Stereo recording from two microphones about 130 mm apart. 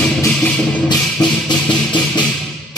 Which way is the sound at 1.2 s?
30° left (ahead or behind).